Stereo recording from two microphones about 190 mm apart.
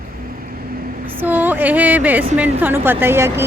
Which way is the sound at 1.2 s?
10° right (ahead or behind).